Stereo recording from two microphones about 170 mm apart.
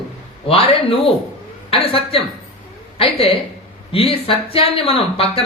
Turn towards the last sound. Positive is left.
turn(degrees=35)  # may be behind; listen again after turning